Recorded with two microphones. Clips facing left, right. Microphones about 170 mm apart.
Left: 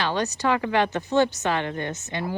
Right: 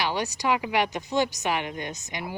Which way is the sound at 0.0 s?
10° right (ahead or behind).